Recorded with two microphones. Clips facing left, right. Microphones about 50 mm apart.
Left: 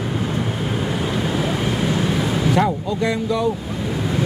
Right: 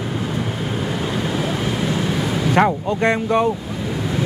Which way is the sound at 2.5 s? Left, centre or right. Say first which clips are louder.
Right 5 dB; right.